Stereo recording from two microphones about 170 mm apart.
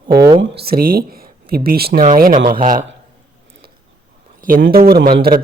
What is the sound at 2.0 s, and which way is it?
Speech, 50° right (ahead or behind).